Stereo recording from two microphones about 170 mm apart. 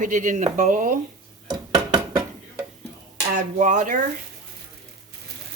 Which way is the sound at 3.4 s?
45° right (ahead or behind).